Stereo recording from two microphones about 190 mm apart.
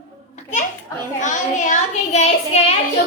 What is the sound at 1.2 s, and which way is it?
A woman's voice, 40° left (ahead or behind).